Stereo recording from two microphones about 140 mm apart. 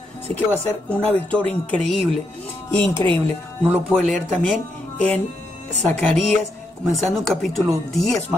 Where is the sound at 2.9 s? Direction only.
35° right (ahead or behind).